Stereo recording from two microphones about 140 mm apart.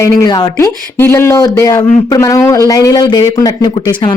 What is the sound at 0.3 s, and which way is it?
Speech, 25° left (ahead or behind).